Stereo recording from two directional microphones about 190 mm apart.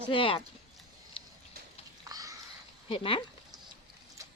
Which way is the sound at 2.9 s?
25° left (ahead or behind).